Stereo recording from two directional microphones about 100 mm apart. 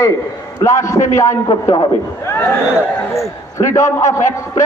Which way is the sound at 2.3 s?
20° left (ahead or behind).